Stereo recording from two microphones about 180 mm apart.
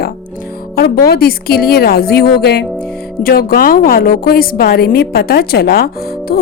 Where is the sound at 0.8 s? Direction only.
60° left (ahead or behind).